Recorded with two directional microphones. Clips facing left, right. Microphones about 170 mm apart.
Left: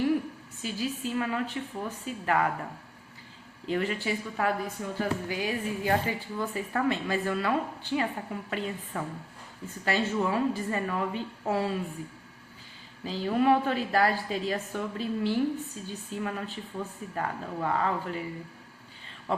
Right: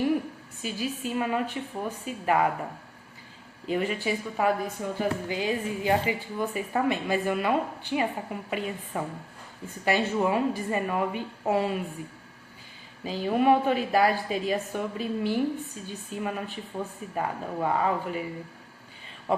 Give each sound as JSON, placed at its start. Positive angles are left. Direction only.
{"t": 0.6, "sound": "a woman's voice", "side_deg": -15}
{"t": 3.7, "sound": "a woman's voice", "side_deg": -15}
{"t": 13.1, "sound": "a woman's voice", "side_deg": -15}
{"t": 19.3, "sound": "speech", "side_deg": -15}